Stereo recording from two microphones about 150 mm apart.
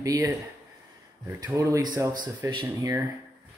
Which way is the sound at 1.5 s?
20° right (ahead or behind).